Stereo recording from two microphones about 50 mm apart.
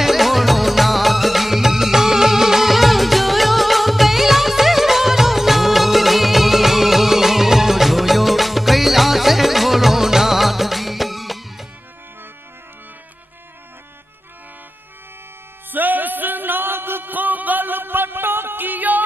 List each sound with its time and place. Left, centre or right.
0.0 s music: centre
15.7 s music: right